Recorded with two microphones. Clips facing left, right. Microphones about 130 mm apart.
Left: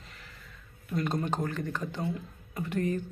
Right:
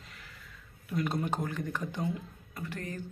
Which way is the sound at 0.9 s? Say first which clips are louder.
Left 1 dB; 5° right (ahead or behind).